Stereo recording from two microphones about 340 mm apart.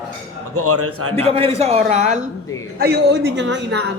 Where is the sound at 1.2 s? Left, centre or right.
Centre.